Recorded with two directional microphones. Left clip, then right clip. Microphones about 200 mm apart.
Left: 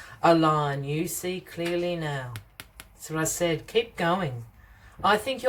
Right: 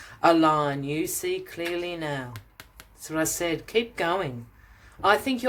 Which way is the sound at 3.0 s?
30° right (ahead or behind).